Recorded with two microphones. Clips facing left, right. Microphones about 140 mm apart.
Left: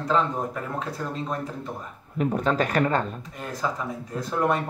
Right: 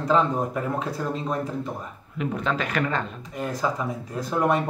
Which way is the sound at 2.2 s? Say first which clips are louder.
Left 3 dB; 40° left (ahead or behind).